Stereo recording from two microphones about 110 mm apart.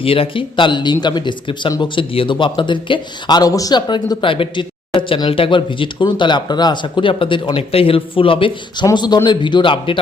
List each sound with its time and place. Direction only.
0.0 s speech: 55° left (ahead or behind)
8.9 s speech: 35° left (ahead or behind)